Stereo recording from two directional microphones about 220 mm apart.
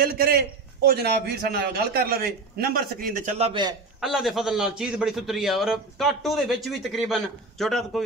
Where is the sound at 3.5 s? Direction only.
20° right (ahead or behind).